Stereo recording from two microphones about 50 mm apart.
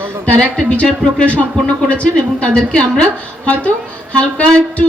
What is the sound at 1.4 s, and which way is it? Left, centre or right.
A man's voice, left.